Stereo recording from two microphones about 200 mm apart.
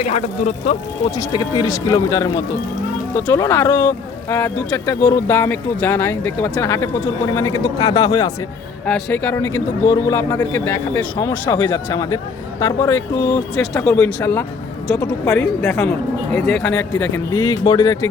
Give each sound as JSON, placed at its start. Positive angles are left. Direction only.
{"t": 0.0, "sound": "speech", "side_deg": 35}
{"t": 1.1, "sound": "speech", "side_deg": 20}
{"t": 11.6, "sound": "a woman's voice", "side_deg": 10}